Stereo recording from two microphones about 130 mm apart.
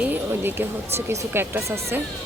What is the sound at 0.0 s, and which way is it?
Speech, 15° right (ahead or behind).